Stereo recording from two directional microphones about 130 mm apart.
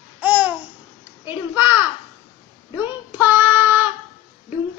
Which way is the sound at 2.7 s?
15° right (ahead or behind).